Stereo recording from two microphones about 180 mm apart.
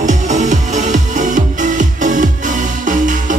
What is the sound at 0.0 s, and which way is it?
Music, 40° right (ahead or behind).